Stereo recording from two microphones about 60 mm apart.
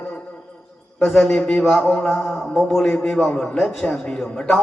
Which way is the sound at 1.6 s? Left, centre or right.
Centre.